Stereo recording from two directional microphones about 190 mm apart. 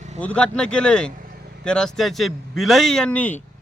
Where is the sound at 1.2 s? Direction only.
50° right (ahead or behind).